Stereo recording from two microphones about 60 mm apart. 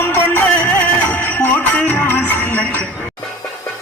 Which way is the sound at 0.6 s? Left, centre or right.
Left.